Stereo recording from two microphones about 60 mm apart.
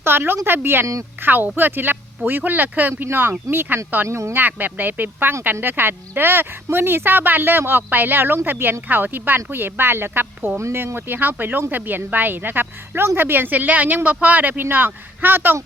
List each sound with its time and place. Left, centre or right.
0.0 s speech: right
4.4 s speech: right